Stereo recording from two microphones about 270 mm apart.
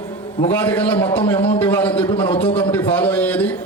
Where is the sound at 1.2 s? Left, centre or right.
Left.